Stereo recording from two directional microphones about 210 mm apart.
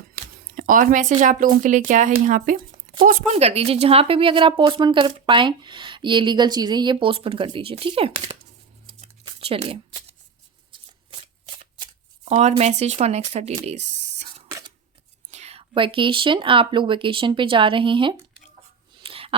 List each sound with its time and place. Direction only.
0.4 s speech: 40° right (ahead or behind); by 8.4 s 25° right (ahead or behind)
8.9 s shuffling cards: 25° right (ahead or behind)
11.8 s speech: 30° right (ahead or behind)
13.7 s a sound: 30° right (ahead or behind)
14.4 s scissors: 15° right (ahead or behind)
15.3 s speech: 30° right (ahead or behind)
19.0 s a sound: 25° right (ahead or behind)